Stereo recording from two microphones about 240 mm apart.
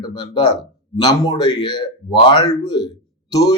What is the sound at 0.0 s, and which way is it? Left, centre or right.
Speech, centre.